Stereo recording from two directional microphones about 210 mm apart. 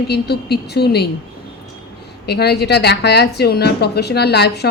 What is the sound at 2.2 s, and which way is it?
A woman's voice, 50° left (ahead or behind).